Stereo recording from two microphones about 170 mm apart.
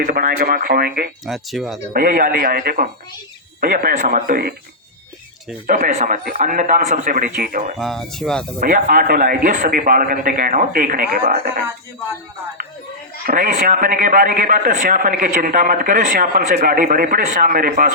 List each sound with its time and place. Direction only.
0.0 s a man's voice: 60° right (ahead or behind)
1.2 s speech: centre (ahead or behind)
1.9 s a man's voice: 60° right (ahead or behind)
5.6 s a man's voice: 55° right (ahead or behind)
7.8 s speech: centre (ahead or behind)
8.6 s a man's voice: 55° right (ahead or behind)
13.2 s a man's voice: 55° right (ahead or behind)